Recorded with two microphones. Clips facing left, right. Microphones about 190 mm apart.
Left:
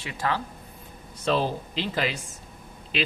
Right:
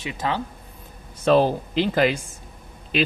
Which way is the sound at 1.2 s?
55° right (ahead or behind).